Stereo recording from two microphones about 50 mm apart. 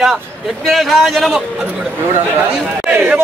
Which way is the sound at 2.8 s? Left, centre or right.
Right.